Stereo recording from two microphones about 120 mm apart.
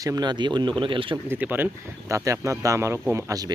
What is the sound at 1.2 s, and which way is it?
Speech, 15° right (ahead or behind).